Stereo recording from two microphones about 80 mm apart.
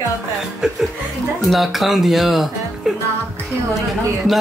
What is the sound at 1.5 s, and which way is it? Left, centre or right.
Speech, centre.